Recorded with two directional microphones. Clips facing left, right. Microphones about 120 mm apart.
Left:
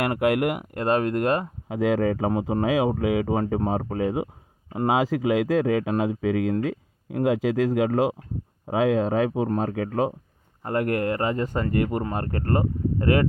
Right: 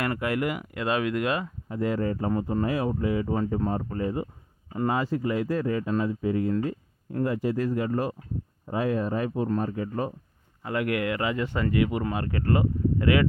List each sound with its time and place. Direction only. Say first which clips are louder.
0.0 s speech: left 5 dB; 65° left (ahead or behind); by 1.5 s 45° left (ahead or behind)
1.6 s speech: left 5 dB; 90° left
4.7 s speech: left 4 dB; 80° left
10.6 s speech: left 3 dB; 45° left (ahead or behind)